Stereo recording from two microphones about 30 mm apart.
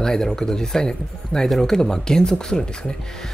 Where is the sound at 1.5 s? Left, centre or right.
Centre.